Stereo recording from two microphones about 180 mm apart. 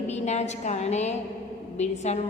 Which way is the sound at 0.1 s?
40° left (ahead or behind).